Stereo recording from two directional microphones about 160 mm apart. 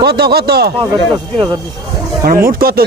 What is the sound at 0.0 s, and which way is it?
Speech, 80° right.